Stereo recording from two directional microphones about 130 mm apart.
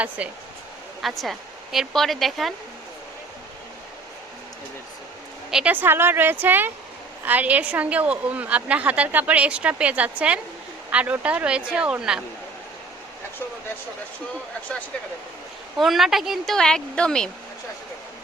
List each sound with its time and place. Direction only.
0.2 s a woman's voice: 10° right (ahead or behind)
5.5 s a woman's voice: 10° right (ahead or behind)
15.8 s a woman's voice: centre (ahead or behind)